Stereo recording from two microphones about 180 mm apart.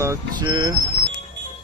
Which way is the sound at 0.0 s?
20° right (ahead or behind).